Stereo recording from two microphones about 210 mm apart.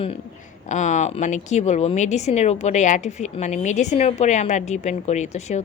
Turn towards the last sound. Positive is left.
turn(degrees=35)  # may be behind; listen again after turning